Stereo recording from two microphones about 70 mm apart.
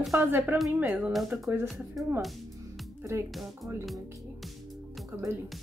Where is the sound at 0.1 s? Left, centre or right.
Right.